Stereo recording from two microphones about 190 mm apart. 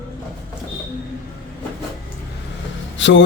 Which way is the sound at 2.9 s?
75° left (ahead or behind).